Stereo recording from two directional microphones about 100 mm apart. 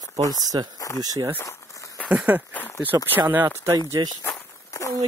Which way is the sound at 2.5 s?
15° left (ahead or behind).